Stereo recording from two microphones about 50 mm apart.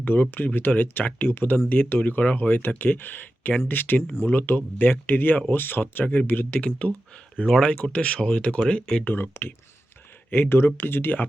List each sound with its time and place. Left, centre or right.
0.0 s speech: left
2.6 s speech: left
6.6 s speech: left
9.0 s speech: left